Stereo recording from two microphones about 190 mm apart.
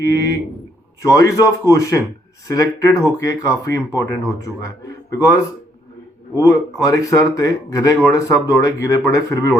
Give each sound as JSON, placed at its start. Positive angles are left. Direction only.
{"t": 0.0, "sound": "speech", "side_deg": 15}
{"t": 6.3, "sound": "speech", "side_deg": 20}